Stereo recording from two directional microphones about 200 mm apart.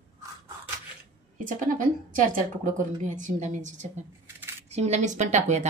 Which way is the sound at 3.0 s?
40° right (ahead or behind).